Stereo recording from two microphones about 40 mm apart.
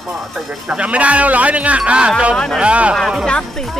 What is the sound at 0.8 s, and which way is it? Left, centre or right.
Speech, right.